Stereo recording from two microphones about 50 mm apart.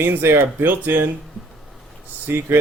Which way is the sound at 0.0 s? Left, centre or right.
Right.